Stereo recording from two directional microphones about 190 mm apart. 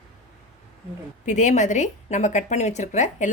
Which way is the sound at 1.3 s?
40° left (ahead or behind).